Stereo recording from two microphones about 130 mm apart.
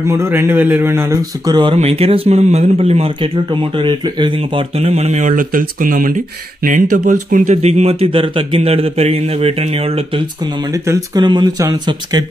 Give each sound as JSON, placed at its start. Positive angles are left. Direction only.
{"t": 0.1, "sound": "a man's voice", "side_deg": -20}
{"t": 1.4, "sound": "speech", "side_deg": -35}
{"t": 1.8, "sound": "speech", "side_deg": -50}
{"t": 7.5, "sound": "a man's voice", "side_deg": -50}
{"t": 10.7, "sound": "speech", "side_deg": -30}